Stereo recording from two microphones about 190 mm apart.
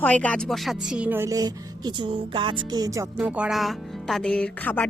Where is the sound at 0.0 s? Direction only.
10° left (ahead or behind); by 3.1 s 20° right (ahead or behind).